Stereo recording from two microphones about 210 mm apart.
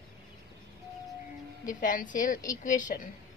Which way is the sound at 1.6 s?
40° left (ahead or behind).